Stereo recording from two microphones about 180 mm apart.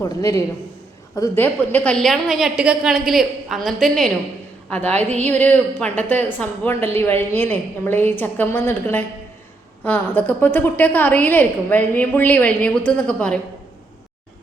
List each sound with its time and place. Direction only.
0.0 s a woman's voice: 20° left (ahead or behind)